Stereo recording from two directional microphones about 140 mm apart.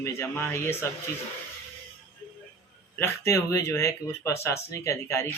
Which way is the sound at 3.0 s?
20° left (ahead or behind).